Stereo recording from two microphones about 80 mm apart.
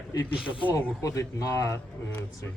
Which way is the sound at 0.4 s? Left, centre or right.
Left.